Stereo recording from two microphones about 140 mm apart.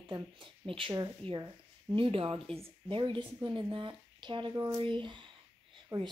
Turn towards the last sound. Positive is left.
turn(degrees=-30)  # may be behind; listen again after turning